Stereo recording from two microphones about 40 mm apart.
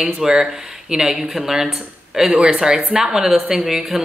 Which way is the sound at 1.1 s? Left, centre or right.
Centre.